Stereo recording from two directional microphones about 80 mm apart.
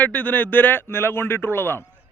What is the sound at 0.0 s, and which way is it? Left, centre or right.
A man's voice, left.